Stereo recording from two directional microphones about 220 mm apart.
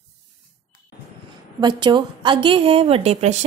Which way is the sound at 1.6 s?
20° right (ahead or behind).